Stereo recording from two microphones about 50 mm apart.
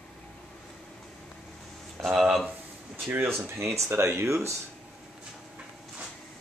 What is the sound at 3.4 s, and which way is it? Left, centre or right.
Speech, right.